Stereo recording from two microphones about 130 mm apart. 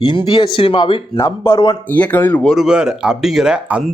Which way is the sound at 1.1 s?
25° left (ahead or behind).